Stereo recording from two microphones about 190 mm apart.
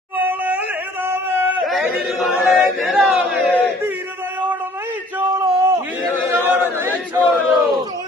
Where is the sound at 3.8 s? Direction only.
10° right (ahead or behind).